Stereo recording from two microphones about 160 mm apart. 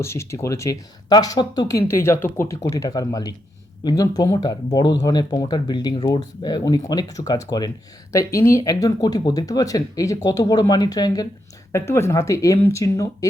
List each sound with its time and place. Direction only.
0.0 s speech: 15° left (ahead or behind)